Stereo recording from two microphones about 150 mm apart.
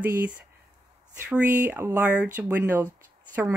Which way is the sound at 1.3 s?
10° right (ahead or behind).